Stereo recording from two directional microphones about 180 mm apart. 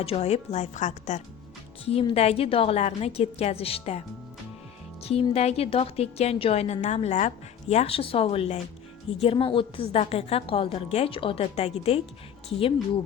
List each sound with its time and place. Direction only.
0.0 s a woman's voice: 35° left (ahead or behind)
5.3 s a woman's voice: 35° left (ahead or behind)